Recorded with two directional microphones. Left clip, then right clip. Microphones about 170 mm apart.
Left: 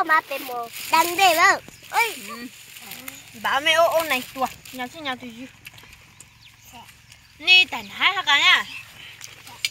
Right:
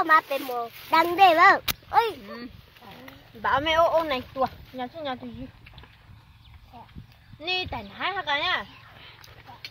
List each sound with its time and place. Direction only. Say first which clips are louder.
0.0 s speech: even; 30° right (ahead or behind)
3.4 s speech: left 3 dB; 35° right (ahead or behind)
7.4 s speech: left 13 dB; 35° right (ahead or behind)